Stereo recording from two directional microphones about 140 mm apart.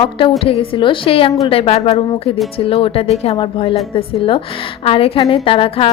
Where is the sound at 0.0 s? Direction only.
40° left (ahead or behind).